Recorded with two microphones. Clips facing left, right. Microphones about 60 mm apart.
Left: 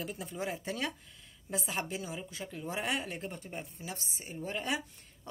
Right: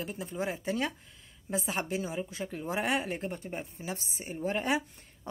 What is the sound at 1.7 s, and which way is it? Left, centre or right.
Speech, right.